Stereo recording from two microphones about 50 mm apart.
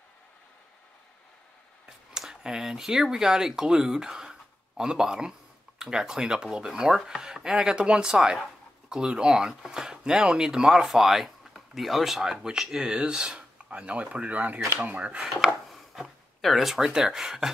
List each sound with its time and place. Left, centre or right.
2.1 s speech: centre
15.7 s speech: centre